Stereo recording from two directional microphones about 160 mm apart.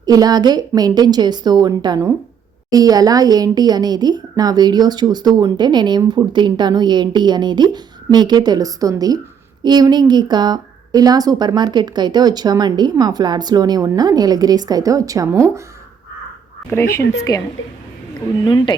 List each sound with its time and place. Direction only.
0.0 s speech: 25° right (ahead or behind)
16.6 s speech: 15° left (ahead or behind)
18.4 s speech: 30° left (ahead or behind)